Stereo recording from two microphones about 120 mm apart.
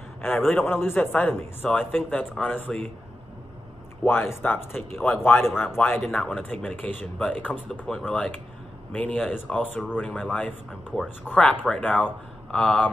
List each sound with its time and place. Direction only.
0.6 s speech: 20° left (ahead or behind)
4.0 s speech: 15° left (ahead or behind)